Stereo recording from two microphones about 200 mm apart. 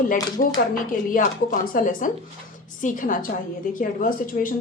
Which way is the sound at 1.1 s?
45° left (ahead or behind).